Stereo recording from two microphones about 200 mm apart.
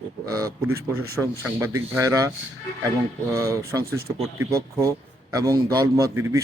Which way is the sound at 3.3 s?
15° right (ahead or behind).